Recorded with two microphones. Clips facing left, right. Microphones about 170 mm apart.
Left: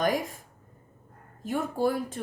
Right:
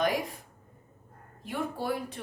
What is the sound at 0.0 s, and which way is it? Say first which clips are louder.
Speech: left 2 dB; 45° left (ahead or behind).